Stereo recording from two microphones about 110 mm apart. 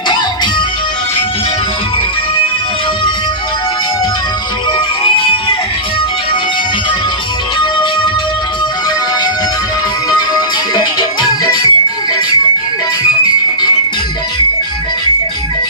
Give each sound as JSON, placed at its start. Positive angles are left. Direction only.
{"t": 10.1, "sound": "music", "side_deg": 40}